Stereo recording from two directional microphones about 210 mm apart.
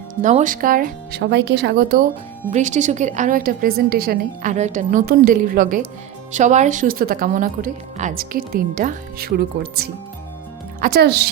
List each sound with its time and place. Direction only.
0.2 s a woman's voice: 35° right (ahead or behind)
2.5 s a woman's voice: 35° right (ahead or behind); by 11.3 s 50° right (ahead or behind)